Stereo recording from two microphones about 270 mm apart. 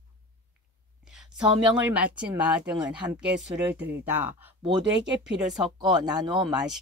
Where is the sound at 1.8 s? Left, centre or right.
Centre.